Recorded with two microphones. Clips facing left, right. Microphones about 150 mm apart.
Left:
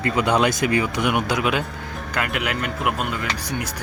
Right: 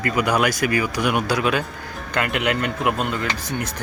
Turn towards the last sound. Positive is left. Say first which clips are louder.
# right 1 dB
turn(degrees=10)  # may be behind; listen again after turning